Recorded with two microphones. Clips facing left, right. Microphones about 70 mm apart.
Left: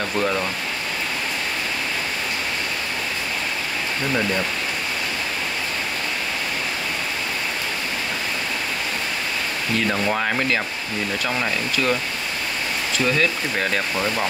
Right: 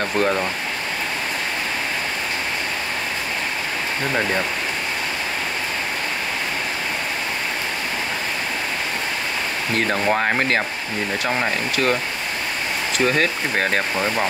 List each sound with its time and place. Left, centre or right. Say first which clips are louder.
11.2 s speech: right 3 dB; right
13.0 s speech: right 2 dB; right